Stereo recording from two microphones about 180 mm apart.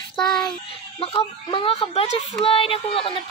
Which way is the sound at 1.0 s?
30° left (ahead or behind).